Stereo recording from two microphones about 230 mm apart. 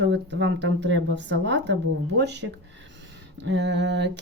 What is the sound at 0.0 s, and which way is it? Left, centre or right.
Speech, right.